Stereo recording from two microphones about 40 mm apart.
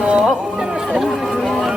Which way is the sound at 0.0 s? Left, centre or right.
Right.